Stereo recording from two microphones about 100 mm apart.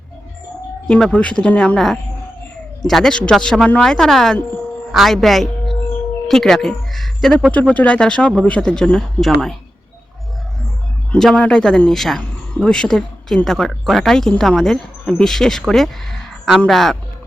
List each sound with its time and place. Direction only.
0.9 s a woman's voice: 5° left (ahead or behind)
7.5 s speech: 15° left (ahead or behind)
11.1 s speech: 5° left (ahead or behind)